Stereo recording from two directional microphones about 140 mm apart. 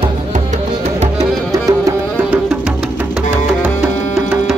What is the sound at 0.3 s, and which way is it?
Music, 55° right (ahead or behind).